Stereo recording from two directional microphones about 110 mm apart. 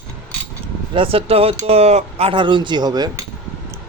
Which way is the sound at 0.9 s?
55° right (ahead or behind).